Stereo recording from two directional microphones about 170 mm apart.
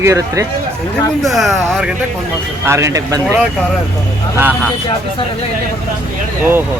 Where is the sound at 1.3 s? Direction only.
Centre (ahead or behind).